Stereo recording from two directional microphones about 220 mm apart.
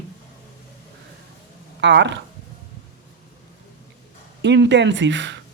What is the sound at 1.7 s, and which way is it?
Speech, 55° right (ahead or behind).